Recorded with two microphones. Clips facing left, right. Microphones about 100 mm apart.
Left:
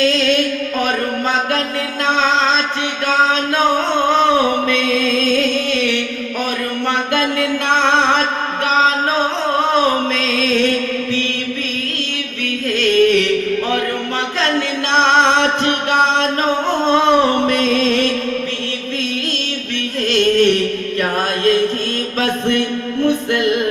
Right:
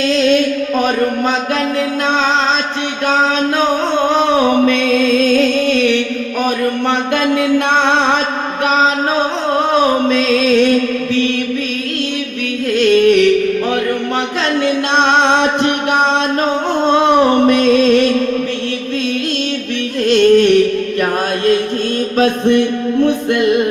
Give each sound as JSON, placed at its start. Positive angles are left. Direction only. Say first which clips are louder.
{"t": 0.1, "sound": "music", "louder": "right 4 dB", "side_deg": -25}
{"t": 4.2, "sound": "music", "louder": "right 3 dB", "side_deg": -20}
{"t": 10.1, "sound": "music", "louder": "right 5 dB", "side_deg": -15}
{"t": 12.7, "sound": "music", "louder": "right 3 dB", "side_deg": -15}
{"t": 16.9, "sound": "a sound", "louder": "right 2 dB", "side_deg": -15}
{"t": 17.7, "sound": "music", "louder": "right 5 dB", "side_deg": -20}
{"t": 20.1, "sound": "music", "louder": "right 5 dB", "side_deg": -20}
{"t": 22.2, "sound": "music", "louder": "right 6 dB", "side_deg": -20}